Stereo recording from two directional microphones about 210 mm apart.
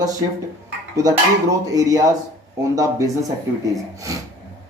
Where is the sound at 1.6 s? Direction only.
15° right (ahead or behind).